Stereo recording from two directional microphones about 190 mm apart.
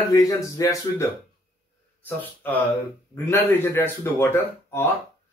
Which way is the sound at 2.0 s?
10° left (ahead or behind).